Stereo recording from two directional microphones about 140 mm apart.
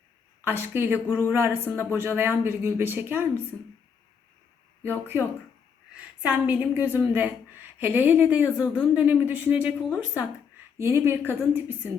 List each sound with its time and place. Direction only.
0.4 s a woman's voice: 15° right (ahead or behind)
4.8 s a woman's voice: 15° right (ahead or behind)
6.2 s a woman's voice: 10° right (ahead or behind)